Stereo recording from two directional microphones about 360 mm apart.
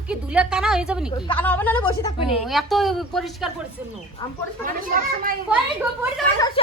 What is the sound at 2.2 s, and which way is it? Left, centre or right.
A woman's voice, centre.